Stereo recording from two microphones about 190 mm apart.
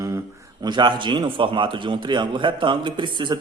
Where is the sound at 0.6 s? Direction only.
25° right (ahead or behind).